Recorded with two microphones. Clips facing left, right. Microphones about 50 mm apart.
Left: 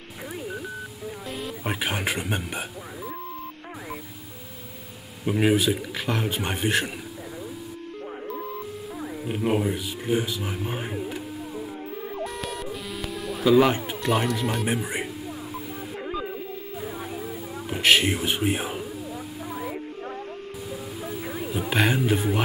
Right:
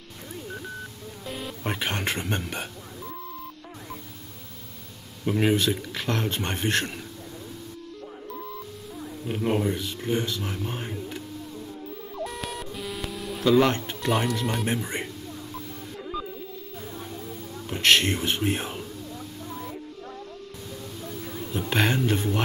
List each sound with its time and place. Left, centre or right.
1.3 s speech: centre
5.2 s speech: centre
9.2 s speech: centre
12.3 s music: centre
12.8 s speech: centre
16.8 s a sound: centre
21.0 s a sound: centre